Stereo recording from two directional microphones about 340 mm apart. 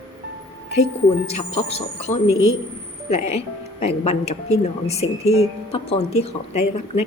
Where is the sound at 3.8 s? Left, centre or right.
Centre.